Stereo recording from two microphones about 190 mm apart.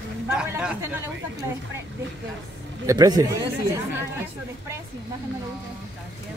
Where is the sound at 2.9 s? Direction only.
20° right (ahead or behind).